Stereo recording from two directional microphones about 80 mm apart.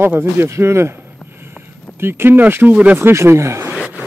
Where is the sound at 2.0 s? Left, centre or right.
Right.